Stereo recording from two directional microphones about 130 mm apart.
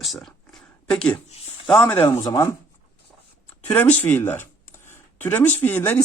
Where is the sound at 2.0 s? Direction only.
25° left (ahead or behind).